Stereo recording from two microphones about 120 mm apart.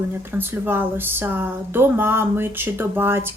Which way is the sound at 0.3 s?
15° right (ahead or behind).